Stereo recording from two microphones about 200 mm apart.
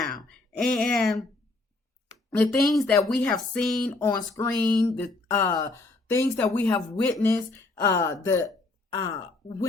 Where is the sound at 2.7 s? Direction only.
5° left (ahead or behind).